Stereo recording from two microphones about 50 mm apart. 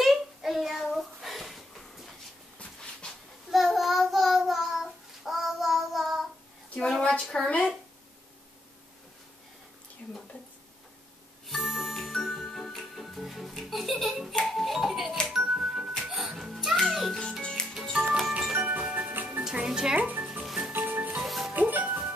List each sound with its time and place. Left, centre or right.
0.0 s a sound: centre
2.8 s a sound: centre
3.4 s child singing: centre
6.8 s a sound: centre
11.4 s music: centre
15.3 s music: centre
16.7 s music: centre
17.4 s music: centre
18.0 s music: centre
18.6 s music: right
19.5 s music: centre
20.0 s music: right
21.2 s music: centre
21.5 s music: right